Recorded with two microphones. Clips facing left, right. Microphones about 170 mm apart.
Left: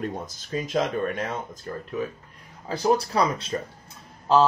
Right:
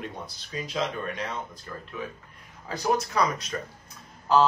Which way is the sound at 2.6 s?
30° left (ahead or behind).